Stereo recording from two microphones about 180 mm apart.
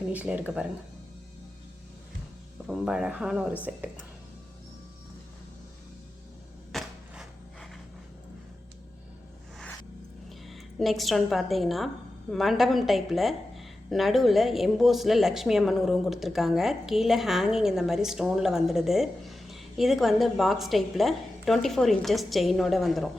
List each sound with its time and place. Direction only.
0.1 s speech: 10° right (ahead or behind)
2.6 s a woman's voice: 5° right (ahead or behind)
6.7 s a sound: centre (ahead or behind)
10.2 s a woman's voice: centre (ahead or behind)